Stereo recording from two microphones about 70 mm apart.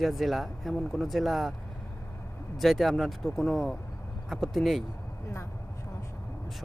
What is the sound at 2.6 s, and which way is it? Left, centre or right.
Speech, centre.